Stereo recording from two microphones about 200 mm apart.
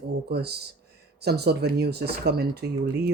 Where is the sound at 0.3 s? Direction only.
55° right (ahead or behind).